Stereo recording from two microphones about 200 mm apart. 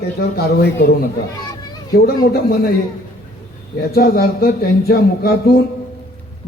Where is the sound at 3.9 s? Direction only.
50° left (ahead or behind).